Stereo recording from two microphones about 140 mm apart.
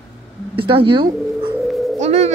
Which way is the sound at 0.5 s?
40° right (ahead or behind).